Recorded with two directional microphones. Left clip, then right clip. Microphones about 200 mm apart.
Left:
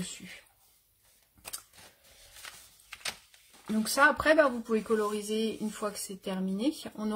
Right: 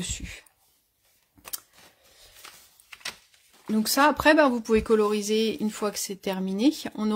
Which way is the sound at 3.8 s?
50° right (ahead or behind).